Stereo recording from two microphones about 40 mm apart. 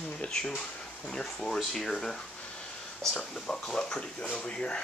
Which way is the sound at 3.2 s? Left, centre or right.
Centre.